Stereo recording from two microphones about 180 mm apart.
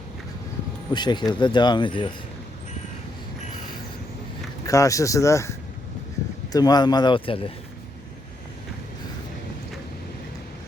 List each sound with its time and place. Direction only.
0.9 s speech: 25° left (ahead or behind)
4.6 s speech: 20° left (ahead or behind)